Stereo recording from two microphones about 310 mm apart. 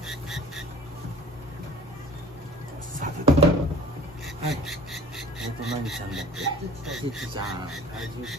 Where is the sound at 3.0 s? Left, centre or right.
Right.